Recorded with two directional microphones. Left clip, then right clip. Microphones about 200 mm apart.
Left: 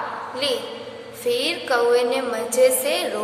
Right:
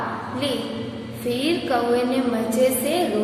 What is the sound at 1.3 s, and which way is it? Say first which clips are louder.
Speech: left 1 dB; 25° left (ahead or behind).